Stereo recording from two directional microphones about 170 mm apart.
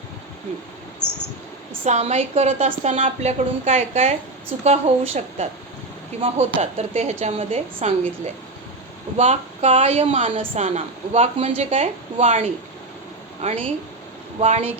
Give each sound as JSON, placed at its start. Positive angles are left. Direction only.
{"t": 1.8, "sound": "a woman's voice", "side_deg": -40}